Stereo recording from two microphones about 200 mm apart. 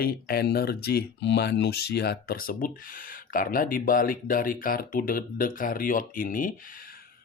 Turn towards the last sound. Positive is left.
turn(degrees=45)  # may be behind; listen again after turning